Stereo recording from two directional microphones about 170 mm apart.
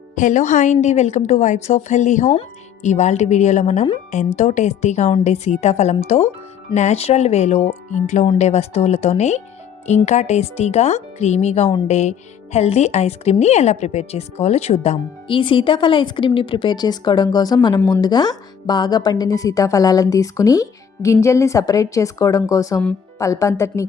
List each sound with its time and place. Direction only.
0.2 s a woman's voice: 45° left (ahead or behind); by 23.8 s 15° left (ahead or behind)